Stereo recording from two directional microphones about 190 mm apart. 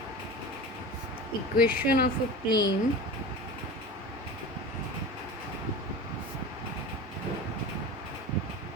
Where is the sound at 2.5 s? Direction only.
20° left (ahead or behind).